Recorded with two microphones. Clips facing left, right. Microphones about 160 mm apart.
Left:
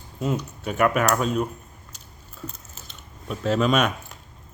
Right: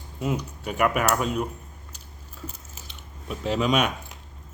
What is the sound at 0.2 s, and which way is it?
Speech, 10° right (ahead or behind).